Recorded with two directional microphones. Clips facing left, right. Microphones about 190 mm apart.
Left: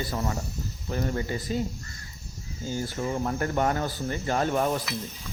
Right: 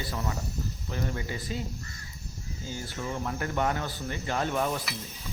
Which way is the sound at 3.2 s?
40° left (ahead or behind).